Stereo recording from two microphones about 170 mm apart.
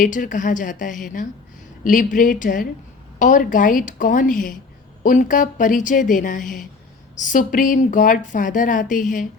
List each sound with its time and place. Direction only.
0.0 s a woman's voice: 50° left (ahead or behind)